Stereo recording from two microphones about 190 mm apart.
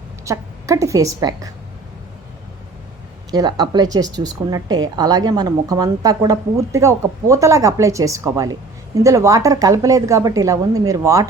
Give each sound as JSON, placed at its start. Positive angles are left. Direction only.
{"t": 0.3, "sound": "a woman's voice", "side_deg": -15}
{"t": 3.3, "sound": "a woman's voice", "side_deg": -20}